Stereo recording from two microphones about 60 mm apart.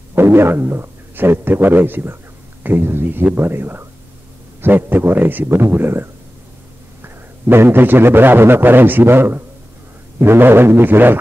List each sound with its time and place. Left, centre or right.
0.1 s a man's voice: right